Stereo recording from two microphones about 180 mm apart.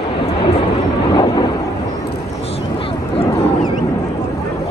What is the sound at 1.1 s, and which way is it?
Thunder, 25° left (ahead or behind).